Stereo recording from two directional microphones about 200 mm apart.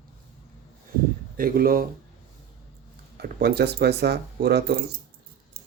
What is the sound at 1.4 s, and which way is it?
Speech, 45° right (ahead or behind).